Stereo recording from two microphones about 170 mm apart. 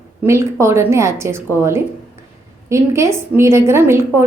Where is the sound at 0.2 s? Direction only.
15° right (ahead or behind).